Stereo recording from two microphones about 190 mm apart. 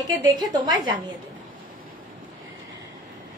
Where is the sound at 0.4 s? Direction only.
25° right (ahead or behind).